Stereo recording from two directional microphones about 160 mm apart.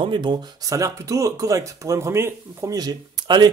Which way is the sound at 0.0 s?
30° right (ahead or behind).